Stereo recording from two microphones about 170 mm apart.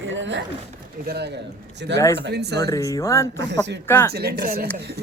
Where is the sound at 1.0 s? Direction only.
75° right (ahead or behind).